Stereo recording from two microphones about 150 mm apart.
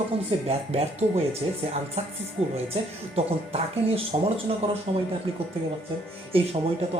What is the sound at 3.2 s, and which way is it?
A woman's voice, 40° right (ahead or behind).